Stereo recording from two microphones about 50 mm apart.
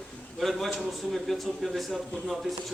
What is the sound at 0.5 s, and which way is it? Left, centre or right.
Speech, centre.